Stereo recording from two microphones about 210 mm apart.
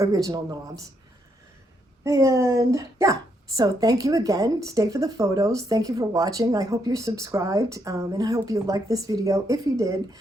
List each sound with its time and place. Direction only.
0.0 s a woman's voice: 15° right (ahead or behind)
2.0 s a woman's voice: 15° right (ahead or behind)